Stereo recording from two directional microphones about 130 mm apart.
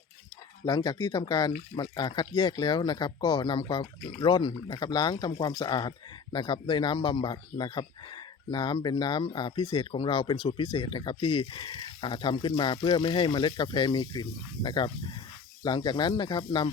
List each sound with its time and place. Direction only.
0.6 s speech: 30° left (ahead or behind)